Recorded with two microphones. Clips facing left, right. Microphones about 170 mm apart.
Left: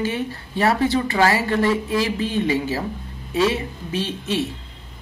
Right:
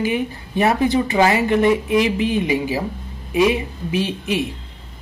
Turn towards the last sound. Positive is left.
turn(degrees=-15)  # may be behind; listen again after turning